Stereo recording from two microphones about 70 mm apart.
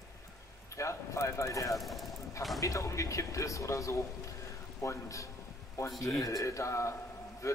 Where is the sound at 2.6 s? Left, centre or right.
Left.